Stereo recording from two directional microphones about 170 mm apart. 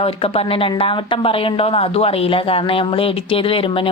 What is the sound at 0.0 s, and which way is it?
Speech, 35° left (ahead or behind).